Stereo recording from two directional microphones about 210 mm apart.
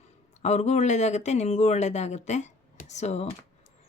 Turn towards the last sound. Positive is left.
turn(degrees=30)  # may be behind; listen again after turning